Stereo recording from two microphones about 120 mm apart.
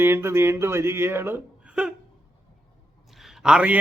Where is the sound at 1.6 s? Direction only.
10° right (ahead or behind).